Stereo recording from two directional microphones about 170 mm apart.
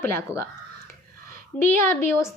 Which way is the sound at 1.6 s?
15° left (ahead or behind).